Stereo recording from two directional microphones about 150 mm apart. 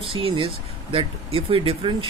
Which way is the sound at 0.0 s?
35° right (ahead or behind).